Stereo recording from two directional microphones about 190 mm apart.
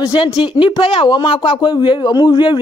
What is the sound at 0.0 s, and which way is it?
Speech, 25° left (ahead or behind).